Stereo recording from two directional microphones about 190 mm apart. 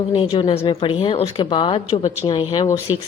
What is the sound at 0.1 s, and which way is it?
Speech, 25° left (ahead or behind).